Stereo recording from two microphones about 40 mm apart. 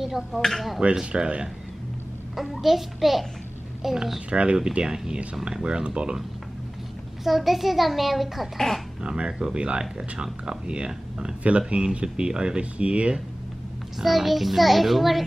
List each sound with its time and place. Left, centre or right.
0.0 s speech: centre
0.4 s a child's voice: centre
1.0 s speech: right
2.5 s a child's voice: centre
4.3 s speech: right
4.7 s speech: centre
7.2 s a child's voice: centre
8.5 s speech: centre
9.0 s speech: right
13.9 s a child's voice: centre